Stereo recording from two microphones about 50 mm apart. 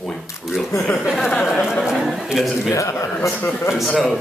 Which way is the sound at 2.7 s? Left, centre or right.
Left.